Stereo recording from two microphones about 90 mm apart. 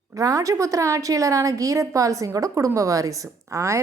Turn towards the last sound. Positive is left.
turn(degrees=-35)  # may be behind; listen again after turning